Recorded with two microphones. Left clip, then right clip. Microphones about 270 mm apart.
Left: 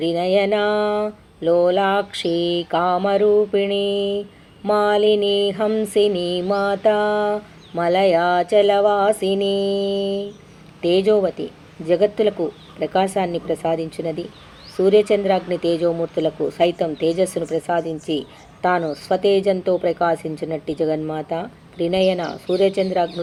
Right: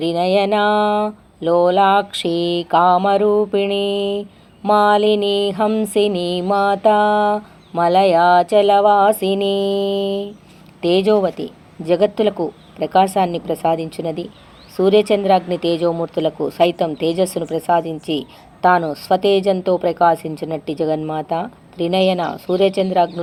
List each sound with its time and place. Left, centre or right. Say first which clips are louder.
0.0 s speech: right 2 dB; right